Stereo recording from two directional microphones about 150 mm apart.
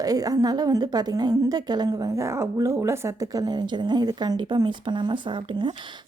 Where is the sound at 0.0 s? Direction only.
25° right (ahead or behind).